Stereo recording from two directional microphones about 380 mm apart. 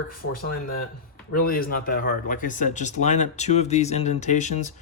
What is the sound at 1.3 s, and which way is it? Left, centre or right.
Speech, left.